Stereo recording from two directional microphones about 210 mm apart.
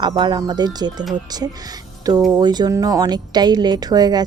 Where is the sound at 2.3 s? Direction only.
20° right (ahead or behind).